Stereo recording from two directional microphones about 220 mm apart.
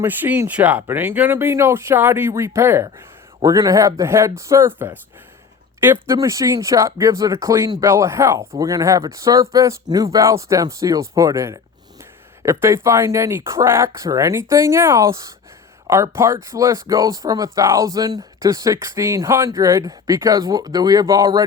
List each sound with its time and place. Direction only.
0.0 s speech: 10° right (ahead or behind)